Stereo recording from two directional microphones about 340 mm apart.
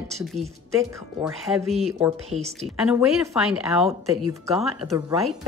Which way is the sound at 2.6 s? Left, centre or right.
Centre.